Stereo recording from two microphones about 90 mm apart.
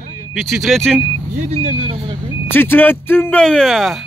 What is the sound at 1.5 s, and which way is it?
Speech, 90° right.